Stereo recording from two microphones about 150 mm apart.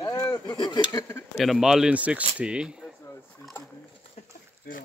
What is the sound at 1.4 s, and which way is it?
Speech, centre (ahead or behind).